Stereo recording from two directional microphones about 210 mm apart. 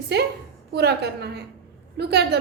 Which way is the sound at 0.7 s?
50° right (ahead or behind).